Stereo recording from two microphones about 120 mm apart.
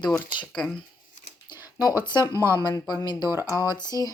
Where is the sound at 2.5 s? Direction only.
35° left (ahead or behind).